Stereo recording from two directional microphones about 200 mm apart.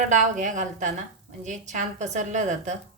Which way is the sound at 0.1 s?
40° right (ahead or behind).